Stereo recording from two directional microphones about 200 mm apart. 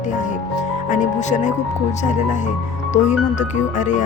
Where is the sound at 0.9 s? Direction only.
40° left (ahead or behind).